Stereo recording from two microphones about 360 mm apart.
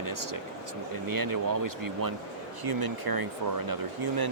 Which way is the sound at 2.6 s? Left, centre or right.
Right.